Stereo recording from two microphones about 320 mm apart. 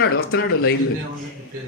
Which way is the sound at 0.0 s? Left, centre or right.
Left.